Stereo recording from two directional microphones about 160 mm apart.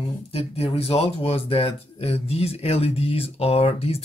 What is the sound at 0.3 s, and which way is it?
Speech, 35° left (ahead or behind).